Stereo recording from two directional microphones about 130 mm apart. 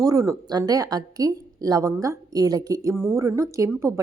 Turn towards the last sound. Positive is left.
turn(degrees=-25)  # may be behind; listen again after turning